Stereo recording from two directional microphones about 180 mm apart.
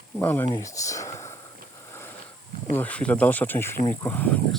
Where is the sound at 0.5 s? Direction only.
20° left (ahead or behind).